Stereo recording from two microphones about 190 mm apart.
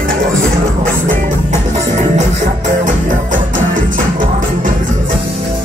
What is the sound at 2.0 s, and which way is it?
Music, 35° right (ahead or behind).